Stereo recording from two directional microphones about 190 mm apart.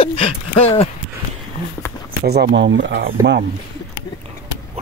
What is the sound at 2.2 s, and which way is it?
Speech, 60° right (ahead or behind).